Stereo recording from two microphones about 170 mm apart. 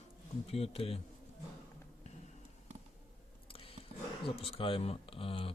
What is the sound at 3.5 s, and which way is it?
Biting, 35° left (ahead or behind).